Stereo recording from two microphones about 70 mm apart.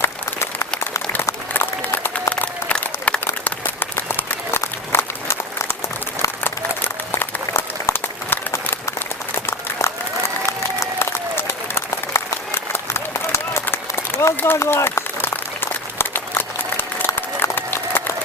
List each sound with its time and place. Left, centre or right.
0.0 s applause: left
2.3 s applause: centre
3.4 s applause: left